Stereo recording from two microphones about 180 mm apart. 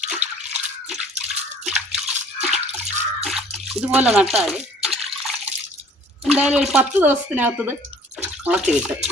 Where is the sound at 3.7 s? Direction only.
5° right (ahead or behind).